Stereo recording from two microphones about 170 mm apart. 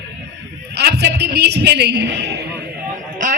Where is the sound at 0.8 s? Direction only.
80° right.